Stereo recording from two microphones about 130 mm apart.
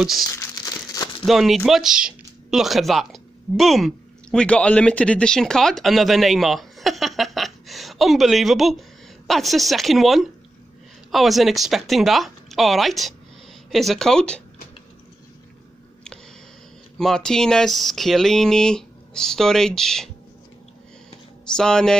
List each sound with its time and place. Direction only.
0.0 s speech: centre (ahead or behind)
0.3 s crumpling: 25° left (ahead or behind)
1.2 s speech: centre (ahead or behind)
17.0 s speech: 5° left (ahead or behind)
21.5 s speech: 5° left (ahead or behind)